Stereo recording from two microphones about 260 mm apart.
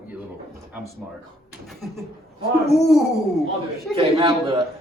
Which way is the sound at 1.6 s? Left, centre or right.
Centre.